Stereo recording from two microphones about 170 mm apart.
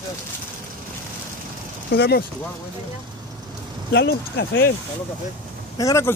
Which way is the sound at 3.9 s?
85° left.